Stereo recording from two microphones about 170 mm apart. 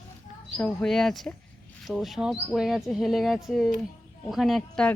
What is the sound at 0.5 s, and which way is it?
Speech, centre (ahead or behind).